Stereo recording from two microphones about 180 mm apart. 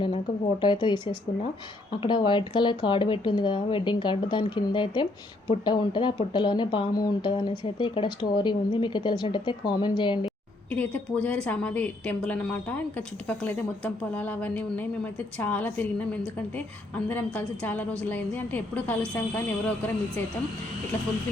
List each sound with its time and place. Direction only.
0.6 s speech: 25° left (ahead or behind)
10.2 s a woman's voice: 5° left (ahead or behind)
17.1 s a woman's voice: 10° left (ahead or behind)